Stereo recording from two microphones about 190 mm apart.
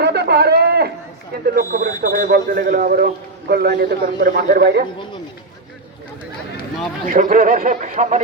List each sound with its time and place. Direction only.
0.0 s a sound: 60° right (ahead or behind)
1.5 s speech: 45° right (ahead or behind)
7.1 s speech: 45° right (ahead or behind)